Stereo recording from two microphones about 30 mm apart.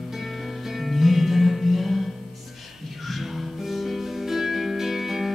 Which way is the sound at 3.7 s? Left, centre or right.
Centre.